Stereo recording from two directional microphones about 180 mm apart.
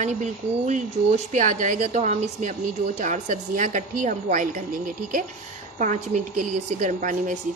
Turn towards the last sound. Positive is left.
turn(degrees=-45)  # may be behind; listen again after turning